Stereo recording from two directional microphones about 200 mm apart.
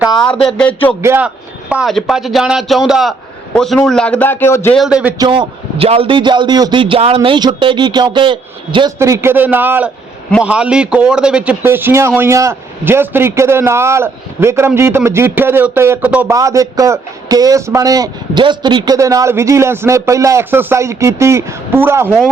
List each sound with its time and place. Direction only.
0.0 s a sound: centre (ahead or behind)
0.4 s speech: 5° left (ahead or behind)
1.0 s a man's voice: 10° right (ahead or behind)
1.7 s a man's voice: centre (ahead or behind)
4.8 s a man's voice: 5° right (ahead or behind)
5.1 s a man's voice: 20° right (ahead or behind)